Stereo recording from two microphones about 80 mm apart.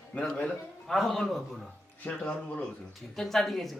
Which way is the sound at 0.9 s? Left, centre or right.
Centre.